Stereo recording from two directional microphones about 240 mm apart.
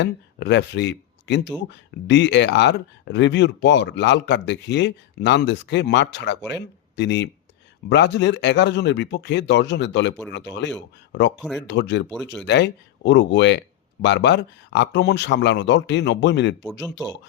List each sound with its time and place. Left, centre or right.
0.0 s speech: left
11.3 s speech: centre
11.6 s speech: left